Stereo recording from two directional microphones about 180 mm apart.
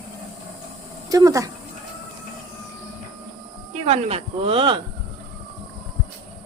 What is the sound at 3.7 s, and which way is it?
Speech, 35° right (ahead or behind).